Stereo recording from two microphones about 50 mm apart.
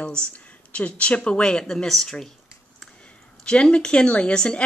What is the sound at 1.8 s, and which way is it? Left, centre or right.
Speech, centre.